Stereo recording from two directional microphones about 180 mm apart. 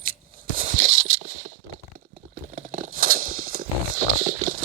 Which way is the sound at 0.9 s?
90° right.